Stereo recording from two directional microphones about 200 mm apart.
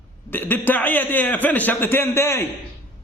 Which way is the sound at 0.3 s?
10° left (ahead or behind).